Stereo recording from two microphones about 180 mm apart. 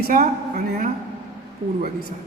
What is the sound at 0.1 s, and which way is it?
Speech, 50° right (ahead or behind).